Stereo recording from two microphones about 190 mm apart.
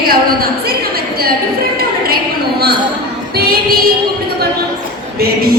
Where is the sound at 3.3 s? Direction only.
55° right (ahead or behind).